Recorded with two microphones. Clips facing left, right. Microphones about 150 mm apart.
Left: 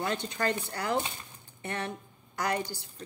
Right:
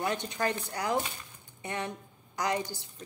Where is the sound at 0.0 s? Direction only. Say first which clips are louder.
Even; 15° right (ahead or behind).